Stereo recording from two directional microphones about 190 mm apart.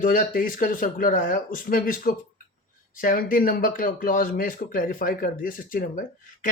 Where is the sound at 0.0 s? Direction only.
45° left (ahead or behind).